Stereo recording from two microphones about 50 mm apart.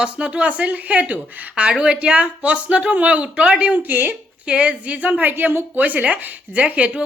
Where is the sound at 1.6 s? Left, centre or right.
Right.